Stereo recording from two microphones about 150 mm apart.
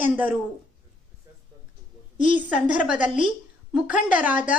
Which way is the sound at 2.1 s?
55° left (ahead or behind).